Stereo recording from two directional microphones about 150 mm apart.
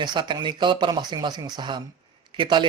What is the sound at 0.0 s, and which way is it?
Speech, 30° right (ahead or behind).